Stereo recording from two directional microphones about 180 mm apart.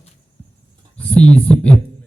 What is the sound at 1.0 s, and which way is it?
Speech, 5° left (ahead or behind).